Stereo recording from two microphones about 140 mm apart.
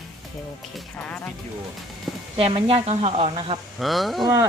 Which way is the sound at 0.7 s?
10° left (ahead or behind).